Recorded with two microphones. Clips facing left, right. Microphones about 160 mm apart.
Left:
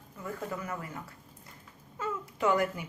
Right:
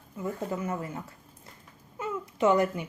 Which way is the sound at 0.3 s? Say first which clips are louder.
Right 3 dB; 25° right (ahead or behind).